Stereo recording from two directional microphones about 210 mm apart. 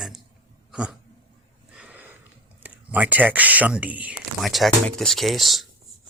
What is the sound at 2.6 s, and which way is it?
Speech, 5° right (ahead or behind).